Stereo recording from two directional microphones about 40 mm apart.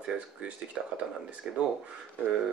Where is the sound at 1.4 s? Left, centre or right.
Centre.